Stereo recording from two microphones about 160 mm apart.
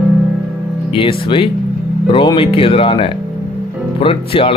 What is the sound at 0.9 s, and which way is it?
Speech, 35° left (ahead or behind).